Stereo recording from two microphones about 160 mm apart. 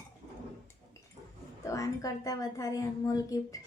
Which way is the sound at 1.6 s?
20° left (ahead or behind).